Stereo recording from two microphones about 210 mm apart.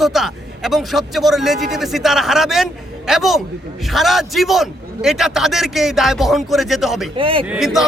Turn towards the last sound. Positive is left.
turn(degrees=0)  # may be behind; listen again after turning